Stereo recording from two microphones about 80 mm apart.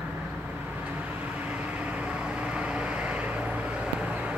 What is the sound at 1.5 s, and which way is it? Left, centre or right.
Vehicle, centre.